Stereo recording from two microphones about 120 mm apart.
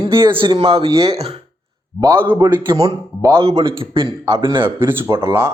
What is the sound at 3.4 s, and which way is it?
A man's voice, 50° right (ahead or behind).